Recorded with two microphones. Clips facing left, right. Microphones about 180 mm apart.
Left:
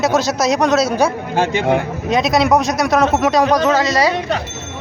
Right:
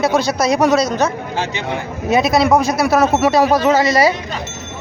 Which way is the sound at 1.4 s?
50° left (ahead or behind).